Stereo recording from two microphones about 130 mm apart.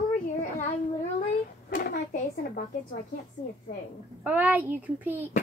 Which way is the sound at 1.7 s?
90° left.